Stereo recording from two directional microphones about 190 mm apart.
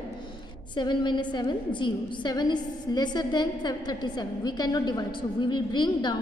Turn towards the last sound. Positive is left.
turn(degrees=25)  # may be behind; listen again after turning